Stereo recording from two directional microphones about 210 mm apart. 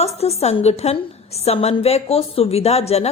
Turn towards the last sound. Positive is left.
turn(degrees=30)  # may be behind; listen again after turning